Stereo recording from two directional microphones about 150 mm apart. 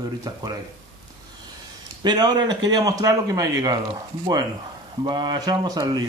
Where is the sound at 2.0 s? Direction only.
25° right (ahead or behind).